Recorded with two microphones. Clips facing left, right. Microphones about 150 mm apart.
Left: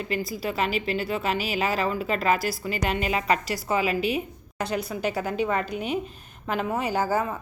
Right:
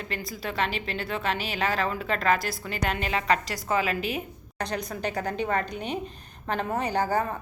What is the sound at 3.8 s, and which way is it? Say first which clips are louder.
Speech: left 4 dB; 45° right (ahead or behind).